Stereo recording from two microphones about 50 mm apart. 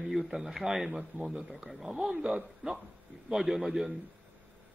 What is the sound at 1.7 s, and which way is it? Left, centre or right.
Speech, centre.